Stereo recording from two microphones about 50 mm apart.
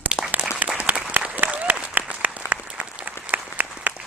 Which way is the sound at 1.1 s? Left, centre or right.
Right.